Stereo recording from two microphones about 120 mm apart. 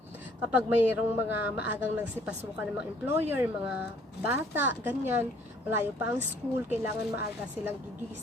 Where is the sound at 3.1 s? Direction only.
15° right (ahead or behind).